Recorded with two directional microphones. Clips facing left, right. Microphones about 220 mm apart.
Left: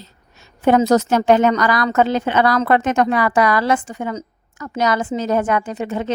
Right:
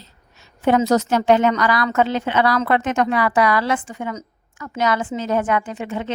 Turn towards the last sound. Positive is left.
turn(degrees=40)  # may be behind; listen again after turning